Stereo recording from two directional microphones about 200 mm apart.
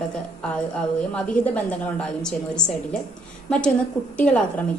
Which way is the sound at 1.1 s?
5° left (ahead or behind).